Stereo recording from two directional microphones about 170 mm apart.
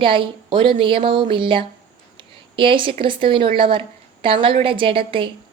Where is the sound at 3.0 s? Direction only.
30° right (ahead or behind).